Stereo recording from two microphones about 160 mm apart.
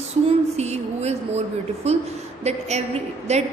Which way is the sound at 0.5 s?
45° right (ahead or behind).